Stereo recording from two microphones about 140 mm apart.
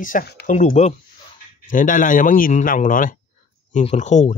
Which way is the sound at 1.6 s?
70° left (ahead or behind).